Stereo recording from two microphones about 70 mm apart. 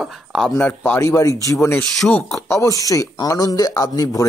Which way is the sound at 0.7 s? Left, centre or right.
Left.